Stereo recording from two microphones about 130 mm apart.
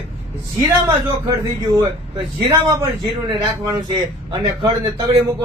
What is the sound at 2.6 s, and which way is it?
A man's voice, 35° right (ahead or behind).